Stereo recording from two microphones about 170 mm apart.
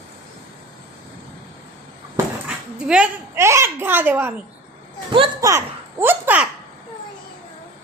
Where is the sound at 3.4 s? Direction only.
15° right (ahead or behind).